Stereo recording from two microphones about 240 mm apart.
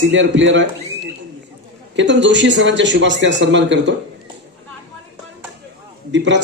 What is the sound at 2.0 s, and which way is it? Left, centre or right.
A man's voice, right.